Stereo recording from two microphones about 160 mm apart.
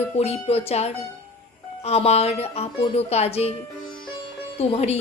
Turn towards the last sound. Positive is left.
turn(degrees=40)  # may be behind; listen again after turning